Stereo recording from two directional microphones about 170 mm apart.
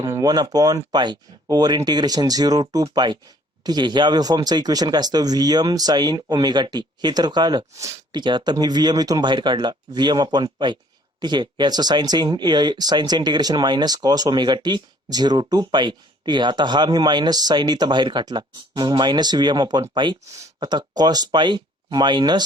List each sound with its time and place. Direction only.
0.0 s speech: 20° right (ahead or behind)